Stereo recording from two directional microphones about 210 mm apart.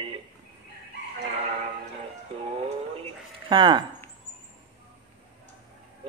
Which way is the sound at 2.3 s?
30° right (ahead or behind).